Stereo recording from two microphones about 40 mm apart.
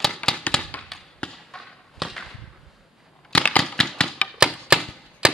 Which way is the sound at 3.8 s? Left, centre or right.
Centre.